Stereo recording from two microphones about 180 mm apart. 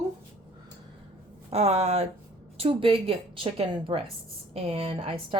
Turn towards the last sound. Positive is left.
turn(degrees=-30)  # may be behind; listen again after turning